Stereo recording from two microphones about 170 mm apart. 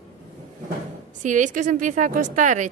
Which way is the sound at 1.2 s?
45° right (ahead or behind).